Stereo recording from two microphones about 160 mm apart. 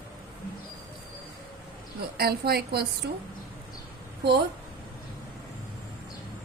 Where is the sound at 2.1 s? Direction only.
80° right.